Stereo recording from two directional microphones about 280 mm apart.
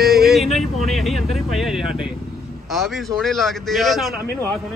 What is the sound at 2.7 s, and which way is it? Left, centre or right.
Speech, centre.